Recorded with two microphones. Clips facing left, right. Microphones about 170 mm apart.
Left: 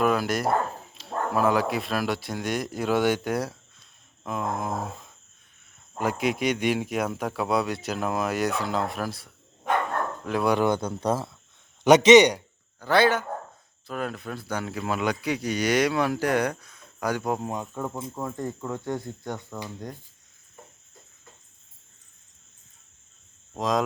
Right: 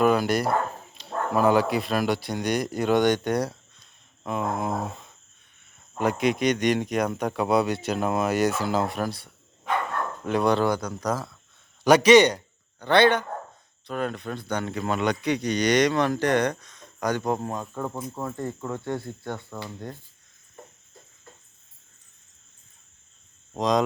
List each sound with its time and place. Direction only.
0.0 s speech: centre (ahead or behind)
4.2 s a sound: centre (ahead or behind)
6.0 s speech: 5° left (ahead or behind)
10.7 s a man's voice: 25° left (ahead or behind)
12.8 s speech: 5° left (ahead or behind)
18.1 s speech: centre (ahead or behind)
18.7 s speech: 15° left (ahead or behind)
23.6 s speech: centre (ahead or behind)